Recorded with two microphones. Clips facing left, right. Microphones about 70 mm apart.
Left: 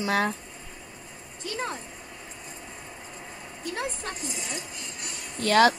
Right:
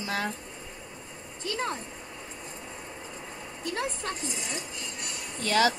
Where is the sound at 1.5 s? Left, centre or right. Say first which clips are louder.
Even; centre.